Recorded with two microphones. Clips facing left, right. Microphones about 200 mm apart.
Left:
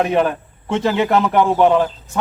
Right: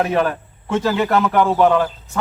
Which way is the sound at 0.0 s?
20° left (ahead or behind).